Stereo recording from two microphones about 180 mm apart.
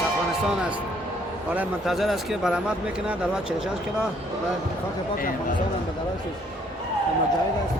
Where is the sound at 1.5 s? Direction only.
Centre (ahead or behind).